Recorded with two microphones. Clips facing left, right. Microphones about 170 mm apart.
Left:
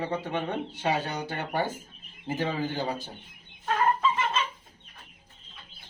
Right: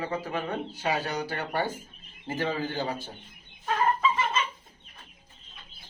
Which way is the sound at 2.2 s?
15° left (ahead or behind).